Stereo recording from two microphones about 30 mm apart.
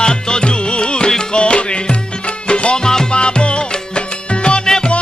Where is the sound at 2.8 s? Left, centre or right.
Centre.